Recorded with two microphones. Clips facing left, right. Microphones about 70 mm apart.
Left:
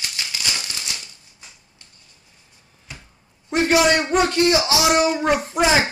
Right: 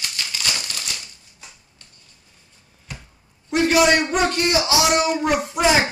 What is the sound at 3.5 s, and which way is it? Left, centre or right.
A man's voice, left.